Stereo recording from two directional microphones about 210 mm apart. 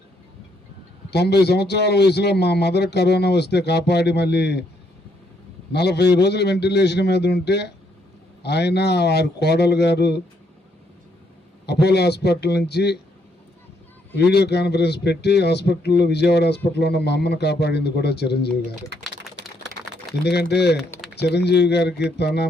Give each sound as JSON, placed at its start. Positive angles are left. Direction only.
{"t": 1.1, "sound": "a man's voice", "side_deg": 50}
{"t": 5.7, "sound": "a man's voice", "side_deg": 50}
{"t": 11.6, "sound": "a man's voice", "side_deg": 50}
{"t": 14.2, "sound": "a man's voice", "side_deg": 55}
{"t": 20.2, "sound": "a man's voice", "side_deg": 50}